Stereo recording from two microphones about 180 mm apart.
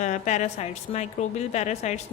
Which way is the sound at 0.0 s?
40° left (ahead or behind).